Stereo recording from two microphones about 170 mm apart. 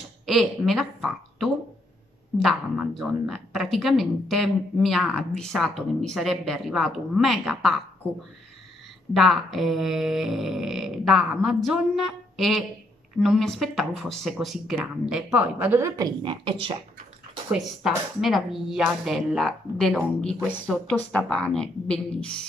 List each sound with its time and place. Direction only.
0.3 s a woman's voice: centre (ahead or behind)
9.1 s a woman's voice: centre (ahead or behind)
16.2 s speech: 30° right (ahead or behind)
17.5 s a woman's voice: centre (ahead or behind)